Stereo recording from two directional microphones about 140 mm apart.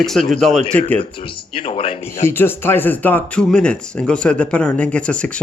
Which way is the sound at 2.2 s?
15° left (ahead or behind).